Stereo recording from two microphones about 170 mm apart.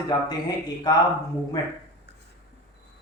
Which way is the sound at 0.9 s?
25° left (ahead or behind).